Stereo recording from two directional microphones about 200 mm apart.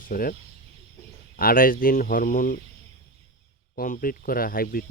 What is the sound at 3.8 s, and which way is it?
Speech, 45° left (ahead or behind).